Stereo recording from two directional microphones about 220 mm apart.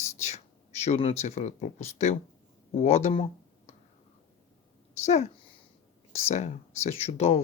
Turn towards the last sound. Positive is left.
turn(degrees=30)  # may be behind; listen again after turning